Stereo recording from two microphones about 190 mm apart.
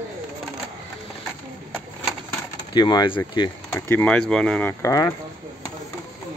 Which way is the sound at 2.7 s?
25° left (ahead or behind).